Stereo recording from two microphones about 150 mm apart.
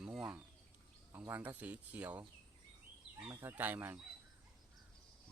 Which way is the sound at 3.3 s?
15° right (ahead or behind).